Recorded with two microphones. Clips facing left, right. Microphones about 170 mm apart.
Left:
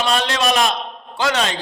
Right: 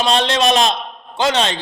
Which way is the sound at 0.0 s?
25° right (ahead or behind).